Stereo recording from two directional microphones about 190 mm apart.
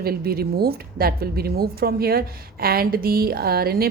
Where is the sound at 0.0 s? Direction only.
55° right (ahead or behind).